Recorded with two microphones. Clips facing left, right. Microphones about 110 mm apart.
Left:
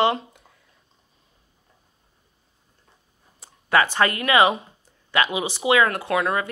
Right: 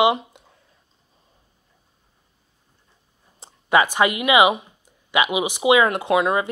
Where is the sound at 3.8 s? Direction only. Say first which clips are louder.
Right 2 dB; 15° right (ahead or behind).